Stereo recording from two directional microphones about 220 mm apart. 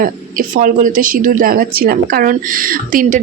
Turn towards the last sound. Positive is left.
turn(degrees=-40)  # may be behind; listen again after turning